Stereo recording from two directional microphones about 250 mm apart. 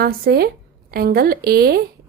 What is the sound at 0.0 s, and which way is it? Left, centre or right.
A woman's voice, right.